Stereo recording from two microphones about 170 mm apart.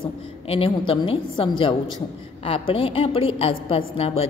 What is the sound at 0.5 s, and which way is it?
A woman's voice, 35° left (ahead or behind).